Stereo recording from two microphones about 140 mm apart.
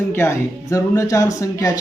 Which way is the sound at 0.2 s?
20° left (ahead or behind).